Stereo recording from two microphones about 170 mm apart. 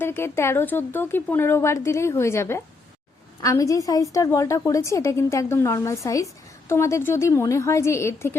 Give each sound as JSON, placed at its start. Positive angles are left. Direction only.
{"t": 0.0, "sound": "a woman's voice", "side_deg": 15}